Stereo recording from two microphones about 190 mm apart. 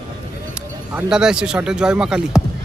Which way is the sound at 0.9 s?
5° right (ahead or behind).